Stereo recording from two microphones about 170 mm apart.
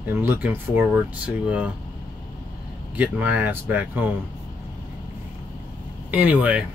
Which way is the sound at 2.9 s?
10° right (ahead or behind).